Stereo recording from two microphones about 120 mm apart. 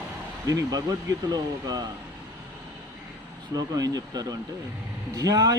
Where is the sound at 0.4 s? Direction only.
30° right (ahead or behind).